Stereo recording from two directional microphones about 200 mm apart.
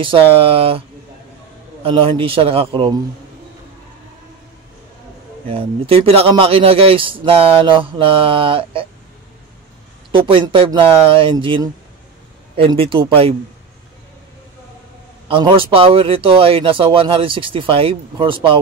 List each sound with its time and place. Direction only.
0.0 s speech: 25° right (ahead or behind)
5.5 s speech: 30° right (ahead or behind)
10.1 s speech: 25° right (ahead or behind)
15.2 s speech: 25° right (ahead or behind)